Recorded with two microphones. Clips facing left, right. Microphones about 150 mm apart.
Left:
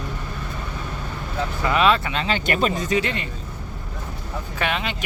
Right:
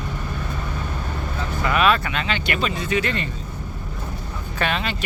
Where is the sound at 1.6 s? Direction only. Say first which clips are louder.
Even; 25° left (ahead or behind); by 3.0 s 40° left (ahead or behind).